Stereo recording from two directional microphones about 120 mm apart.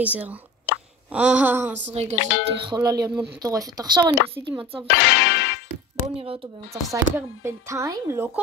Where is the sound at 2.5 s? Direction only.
40° right (ahead or behind).